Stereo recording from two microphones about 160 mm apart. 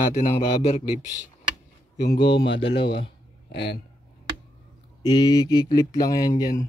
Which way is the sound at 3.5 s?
90° left.